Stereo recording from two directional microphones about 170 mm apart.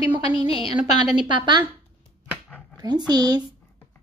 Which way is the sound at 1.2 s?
30° right (ahead or behind).